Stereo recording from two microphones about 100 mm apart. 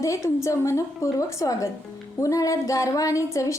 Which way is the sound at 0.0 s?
30° left (ahead or behind).